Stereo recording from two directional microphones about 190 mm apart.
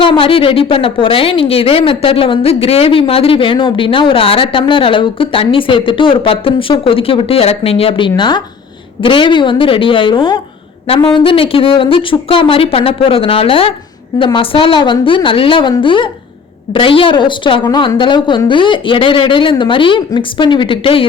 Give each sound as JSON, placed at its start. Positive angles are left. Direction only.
{"t": 0.0, "sound": "a woman's voice", "side_deg": 30}